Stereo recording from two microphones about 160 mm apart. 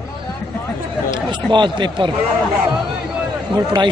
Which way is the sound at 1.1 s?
30° right (ahead or behind).